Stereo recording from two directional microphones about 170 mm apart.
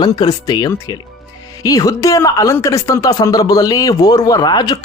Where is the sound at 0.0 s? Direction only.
25° left (ahead or behind).